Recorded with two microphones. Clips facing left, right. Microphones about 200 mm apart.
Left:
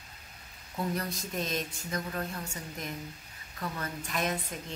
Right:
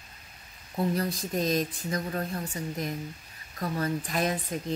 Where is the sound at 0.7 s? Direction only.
35° right (ahead or behind).